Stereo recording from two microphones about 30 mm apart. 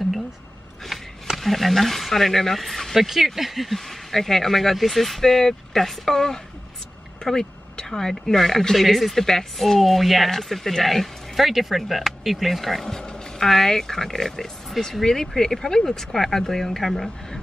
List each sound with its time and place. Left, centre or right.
1.3 s speech: centre
3.7 s speech: centre
7.9 s speech: centre
9.2 s speech: centre
10.3 s speech: centre
13.4 s speech: centre